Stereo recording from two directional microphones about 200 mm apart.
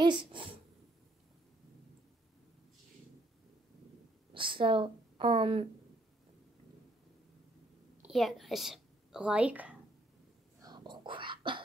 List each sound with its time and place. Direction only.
0.0 s a sound: 25° right (ahead or behind)
4.3 s speech: 25° right (ahead or behind)
8.0 s a woman's voice: centre (ahead or behind)
10.6 s whispering: 20° right (ahead or behind)